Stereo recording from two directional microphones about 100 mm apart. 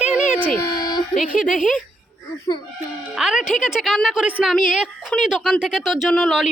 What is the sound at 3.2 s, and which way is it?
A woman's voice, 5° right (ahead or behind).